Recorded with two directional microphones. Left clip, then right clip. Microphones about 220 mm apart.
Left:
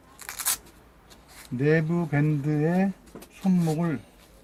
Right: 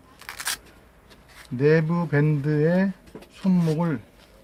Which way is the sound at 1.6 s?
15° right (ahead or behind).